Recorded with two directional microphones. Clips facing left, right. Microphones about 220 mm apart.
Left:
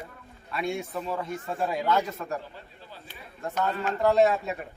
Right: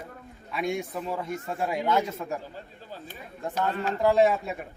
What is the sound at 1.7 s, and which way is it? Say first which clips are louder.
Speech: right 1 dB; 20° right (ahead or behind).